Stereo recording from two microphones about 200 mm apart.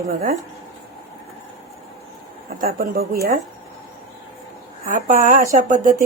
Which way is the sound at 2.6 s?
45° right (ahead or behind).